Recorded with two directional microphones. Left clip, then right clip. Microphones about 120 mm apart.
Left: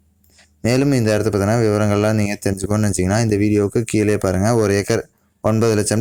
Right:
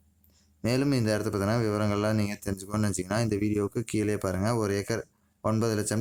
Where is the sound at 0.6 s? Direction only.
25° left (ahead or behind).